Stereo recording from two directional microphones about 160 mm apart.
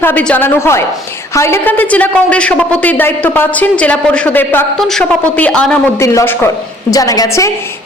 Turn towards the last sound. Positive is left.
turn(degrees=20)  # may be behind; listen again after turning